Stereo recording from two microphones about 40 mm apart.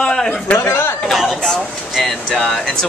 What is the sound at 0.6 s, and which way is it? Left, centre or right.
Speech, left.